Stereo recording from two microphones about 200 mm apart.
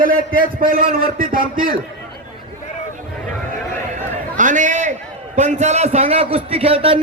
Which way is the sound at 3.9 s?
40° right (ahead or behind).